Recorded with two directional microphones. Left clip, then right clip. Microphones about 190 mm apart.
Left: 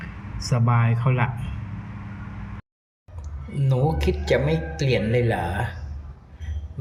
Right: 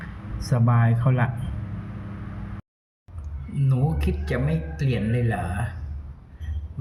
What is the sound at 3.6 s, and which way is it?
Speech, 35° right (ahead or behind).